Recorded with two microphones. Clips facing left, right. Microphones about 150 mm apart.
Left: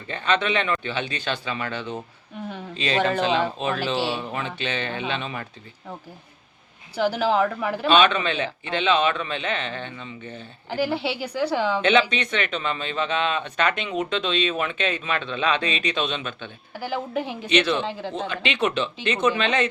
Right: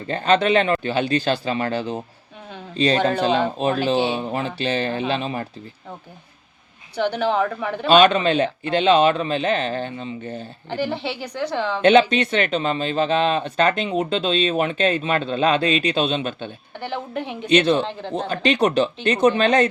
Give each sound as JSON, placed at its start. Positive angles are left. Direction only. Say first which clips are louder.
{"t": 0.1, "sound": "speech", "louder": "right 6 dB", "side_deg": -35}
{"t": 6.9, "sound": "speech", "louder": "right 1 dB", "side_deg": 5}
{"t": 7.9, "sound": "speech", "louder": "right 5 dB", "side_deg": -40}
{"t": 10.7, "sound": "a woman's voice", "louder": "even", "side_deg": 5}
{"t": 11.8, "sound": "speech", "louder": "right 10 dB", "side_deg": -35}
{"t": 16.7, "sound": "speech", "louder": "left 1 dB", "side_deg": 5}
{"t": 17.5, "sound": "speech", "louder": "right 5 dB", "side_deg": -35}
{"t": 17.8, "sound": "speech", "louder": "even", "side_deg": 5}
{"t": 18.3, "sound": "speech", "louder": "right 7 dB", "side_deg": -40}